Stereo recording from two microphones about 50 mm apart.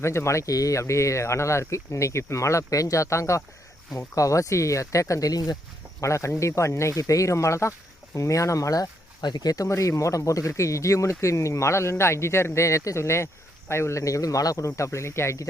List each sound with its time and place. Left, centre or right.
0.0 s speech: left
14.8 s speech: left